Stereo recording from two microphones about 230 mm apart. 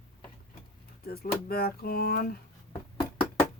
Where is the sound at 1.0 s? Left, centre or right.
Left.